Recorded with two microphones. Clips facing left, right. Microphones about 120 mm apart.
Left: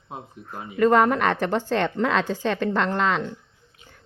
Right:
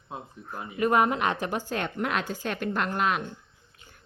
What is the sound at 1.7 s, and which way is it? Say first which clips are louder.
A woman's voice: left 8 dB; 90° left.